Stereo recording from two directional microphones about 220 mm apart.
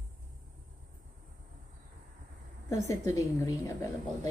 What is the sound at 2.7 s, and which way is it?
A woman's voice, 15° left (ahead or behind).